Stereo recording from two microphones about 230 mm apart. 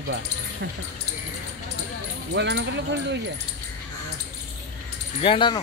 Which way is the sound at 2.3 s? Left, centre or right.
Right.